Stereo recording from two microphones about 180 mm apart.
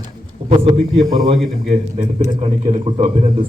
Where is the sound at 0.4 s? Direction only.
35° right (ahead or behind).